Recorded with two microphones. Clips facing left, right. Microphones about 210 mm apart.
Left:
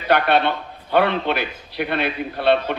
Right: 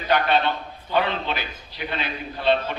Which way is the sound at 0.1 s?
65° left (ahead or behind).